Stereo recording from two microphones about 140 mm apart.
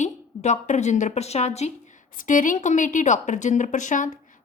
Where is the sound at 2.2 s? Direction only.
70° left (ahead or behind).